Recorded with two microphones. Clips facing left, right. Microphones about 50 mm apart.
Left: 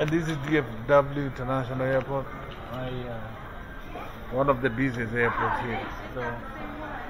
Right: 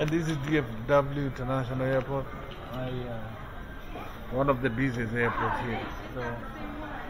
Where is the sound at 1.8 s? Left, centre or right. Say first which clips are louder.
Left 2 dB; centre.